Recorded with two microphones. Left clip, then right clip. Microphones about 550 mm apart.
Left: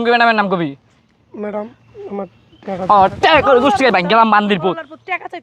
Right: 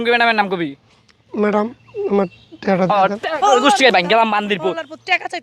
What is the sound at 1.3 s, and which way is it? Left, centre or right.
Speech, right.